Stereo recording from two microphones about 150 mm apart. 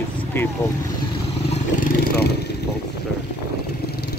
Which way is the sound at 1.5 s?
60° left (ahead or behind).